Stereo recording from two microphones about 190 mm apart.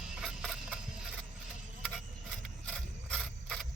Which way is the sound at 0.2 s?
5° right (ahead or behind).